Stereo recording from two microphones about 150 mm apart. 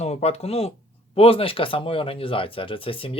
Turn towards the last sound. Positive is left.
turn(degrees=35)  # may be behind; listen again after turning